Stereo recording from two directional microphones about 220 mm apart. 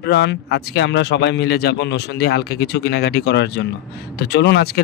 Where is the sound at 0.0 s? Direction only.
50° left (ahead or behind).